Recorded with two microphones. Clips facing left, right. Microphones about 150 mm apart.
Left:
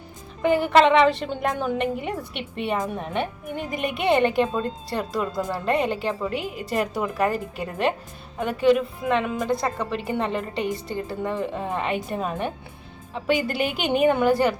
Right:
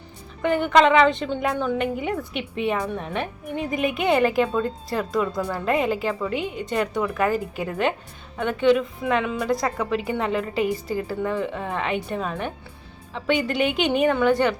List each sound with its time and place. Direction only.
0.4 s a woman's voice: 5° left (ahead or behind)
1.8 s a woman's voice: centre (ahead or behind)
2.7 s a woman's voice: 15° left (ahead or behind)
3.0 s a woman's voice: centre (ahead or behind)
4.4 s a woman's voice: 20° left (ahead or behind)
4.9 s a woman's voice: centre (ahead or behind)
13.5 s a woman's voice: 5° left (ahead or behind)